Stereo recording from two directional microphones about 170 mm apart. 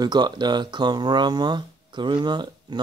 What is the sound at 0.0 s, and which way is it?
Speech, 25° right (ahead or behind).